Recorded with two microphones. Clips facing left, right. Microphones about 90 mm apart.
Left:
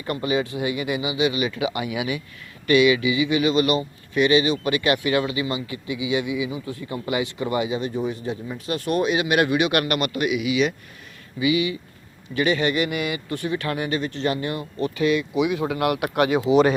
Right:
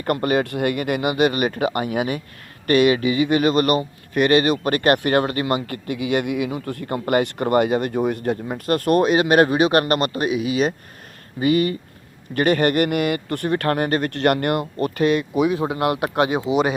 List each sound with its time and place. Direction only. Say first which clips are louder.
0.0 s speech: right 4 dB; 55° right (ahead or behind); by 16.4 s 25° right (ahead or behind)